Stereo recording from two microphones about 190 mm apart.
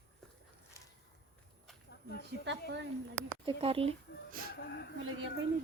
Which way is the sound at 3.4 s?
30° right (ahead or behind).